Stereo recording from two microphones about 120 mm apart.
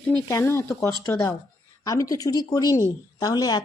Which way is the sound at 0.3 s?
25° left (ahead or behind).